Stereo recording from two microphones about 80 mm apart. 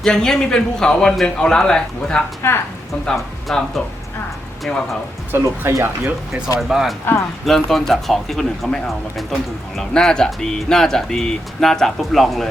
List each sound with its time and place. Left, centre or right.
0.0 s a man's voice: centre
2.4 s a woman's voice: left
3.5 s speech: centre
5.3 s speech: right
6.6 s speech: centre